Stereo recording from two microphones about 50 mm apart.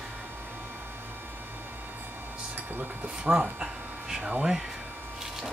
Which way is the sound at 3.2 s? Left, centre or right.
Centre.